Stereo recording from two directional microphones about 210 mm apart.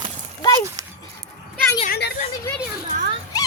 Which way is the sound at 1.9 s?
55° left (ahead or behind).